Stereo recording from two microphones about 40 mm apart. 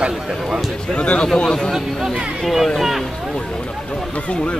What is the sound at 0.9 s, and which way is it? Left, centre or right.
Speech, left.